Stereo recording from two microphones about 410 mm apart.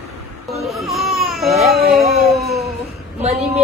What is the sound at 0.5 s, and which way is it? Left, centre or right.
Baby cry, centre.